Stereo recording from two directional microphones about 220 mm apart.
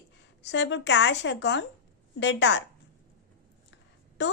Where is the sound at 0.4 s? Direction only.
55° left (ahead or behind).